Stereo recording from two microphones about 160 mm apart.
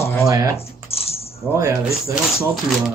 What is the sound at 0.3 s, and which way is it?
Speech, 20° right (ahead or behind).